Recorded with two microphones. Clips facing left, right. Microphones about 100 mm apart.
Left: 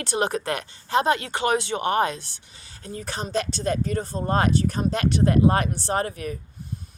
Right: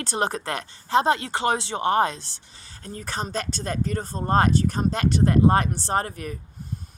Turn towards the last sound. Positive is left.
turn(degrees=-35)  # may be behind; listen again after turning